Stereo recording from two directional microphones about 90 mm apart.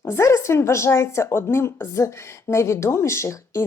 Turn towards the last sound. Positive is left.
turn(degrees=30)  # may be behind; listen again after turning